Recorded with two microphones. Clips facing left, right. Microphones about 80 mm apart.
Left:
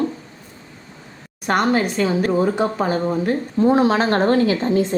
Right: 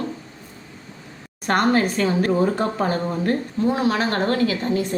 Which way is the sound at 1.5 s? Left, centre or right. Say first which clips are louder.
Left 1 dB; centre.